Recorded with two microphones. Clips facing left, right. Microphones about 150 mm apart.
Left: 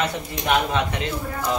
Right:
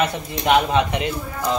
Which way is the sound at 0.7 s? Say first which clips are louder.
Right 4 dB; 20° right (ahead or behind).